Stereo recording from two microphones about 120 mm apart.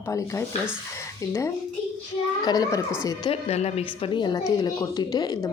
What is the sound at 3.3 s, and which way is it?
A woman's voice, 65° left (ahead or behind).